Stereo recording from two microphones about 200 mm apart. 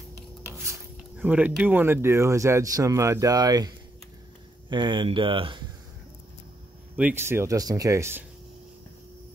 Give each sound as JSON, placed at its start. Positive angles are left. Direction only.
{"t": 0.5, "sound": "speech", "side_deg": -10}
{"t": 7.0, "sound": "speech", "side_deg": -10}